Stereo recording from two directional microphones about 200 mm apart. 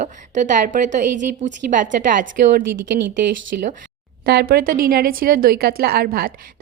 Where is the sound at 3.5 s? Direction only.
50° right (ahead or behind).